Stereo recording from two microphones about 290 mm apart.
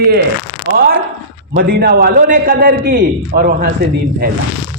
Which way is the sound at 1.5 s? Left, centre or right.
Right.